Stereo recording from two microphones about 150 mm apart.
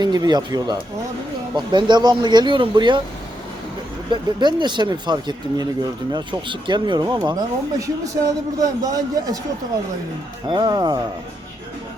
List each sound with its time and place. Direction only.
0.0 s speech: 30° right (ahead or behind)
4.1 s speech: 30° right (ahead or behind)
10.4 s speech: 30° right (ahead or behind)